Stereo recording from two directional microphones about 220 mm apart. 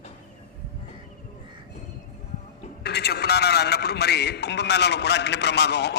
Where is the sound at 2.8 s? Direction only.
50° left (ahead or behind).